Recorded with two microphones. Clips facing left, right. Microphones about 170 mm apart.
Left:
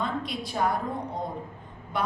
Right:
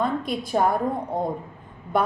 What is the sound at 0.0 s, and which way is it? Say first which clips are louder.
A woman's voice: right 6 dB; 50° right (ahead or behind).